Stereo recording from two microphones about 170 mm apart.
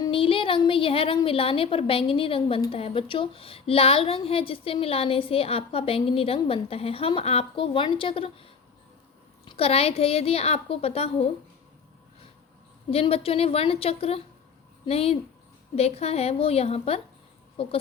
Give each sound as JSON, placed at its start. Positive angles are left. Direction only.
{"t": 0.0, "sound": "a woman's voice", "side_deg": 30}
{"t": 9.5, "sound": "a woman's voice", "side_deg": 35}
{"t": 12.9, "sound": "a woman's voice", "side_deg": 35}